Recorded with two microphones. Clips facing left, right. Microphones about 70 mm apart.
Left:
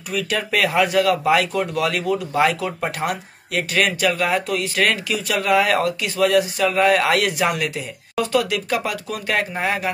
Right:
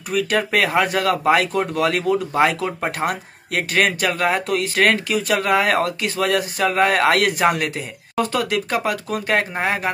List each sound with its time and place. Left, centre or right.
0.1 s speech: right